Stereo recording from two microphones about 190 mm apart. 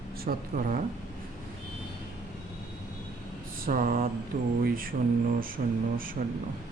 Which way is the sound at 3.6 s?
50° right (ahead or behind).